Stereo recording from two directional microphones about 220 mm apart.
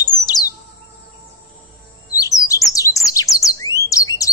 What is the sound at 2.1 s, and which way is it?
Chirp, 15° left (ahead or behind).